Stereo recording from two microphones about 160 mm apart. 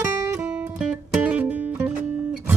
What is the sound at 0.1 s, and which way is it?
Music, 15° right (ahead or behind).